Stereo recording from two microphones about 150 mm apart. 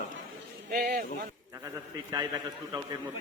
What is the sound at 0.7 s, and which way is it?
Speech, 85° right.